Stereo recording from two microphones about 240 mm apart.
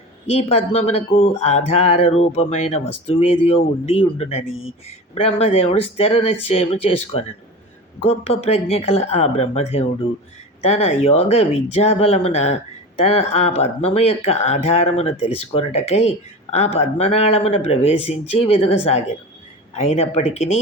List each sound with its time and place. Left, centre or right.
0.3 s speech: left